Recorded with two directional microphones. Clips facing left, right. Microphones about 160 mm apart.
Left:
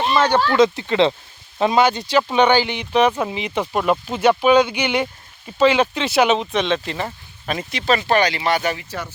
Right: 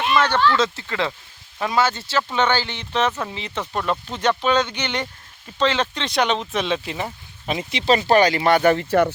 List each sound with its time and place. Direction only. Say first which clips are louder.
0.0 s a sound: left 2 dB; 30° left (ahead or behind)
0.5 s speech: left 7 dB; 15° left (ahead or behind); by 7.1 s 5° right (ahead or behind)
7.4 s speech: right 1 dB; 20° right (ahead or behind)
8.0 s speech: right 2 dB; 40° right (ahead or behind); by 9.1 s 60° right (ahead or behind)